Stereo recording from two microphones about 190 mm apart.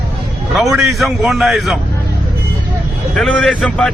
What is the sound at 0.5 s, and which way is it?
Speech, centre (ahead or behind).